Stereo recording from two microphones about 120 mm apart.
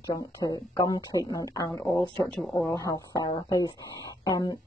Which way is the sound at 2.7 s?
25° left (ahead or behind).